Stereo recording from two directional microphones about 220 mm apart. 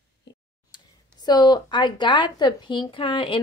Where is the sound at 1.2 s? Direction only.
20° left (ahead or behind).